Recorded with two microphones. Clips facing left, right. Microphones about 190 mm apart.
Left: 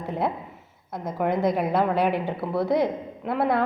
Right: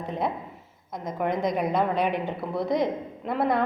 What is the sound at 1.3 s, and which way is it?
Speech, 60° left (ahead or behind).